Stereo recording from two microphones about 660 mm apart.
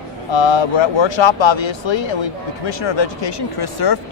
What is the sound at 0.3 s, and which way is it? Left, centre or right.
Speech, left.